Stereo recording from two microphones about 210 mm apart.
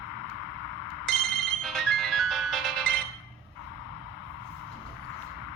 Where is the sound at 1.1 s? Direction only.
Centre (ahead or behind).